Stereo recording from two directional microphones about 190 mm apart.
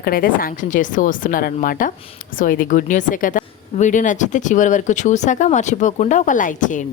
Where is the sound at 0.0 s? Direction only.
50° left (ahead or behind).